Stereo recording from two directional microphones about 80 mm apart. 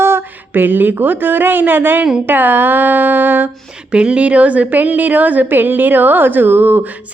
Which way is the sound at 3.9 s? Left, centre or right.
Centre.